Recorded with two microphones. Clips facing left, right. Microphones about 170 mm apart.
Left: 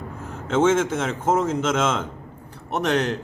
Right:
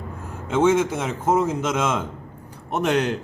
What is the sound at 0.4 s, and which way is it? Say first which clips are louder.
Speech: even; 10° right (ahead or behind).